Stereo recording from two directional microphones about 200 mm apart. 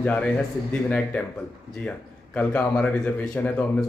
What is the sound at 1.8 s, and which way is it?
Speech, 5° left (ahead or behind).